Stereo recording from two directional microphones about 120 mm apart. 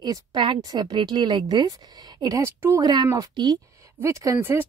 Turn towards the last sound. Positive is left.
turn(degrees=-20)  # may be behind; listen again after turning